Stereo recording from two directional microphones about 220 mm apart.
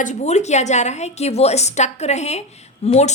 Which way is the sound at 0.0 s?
30° left (ahead or behind).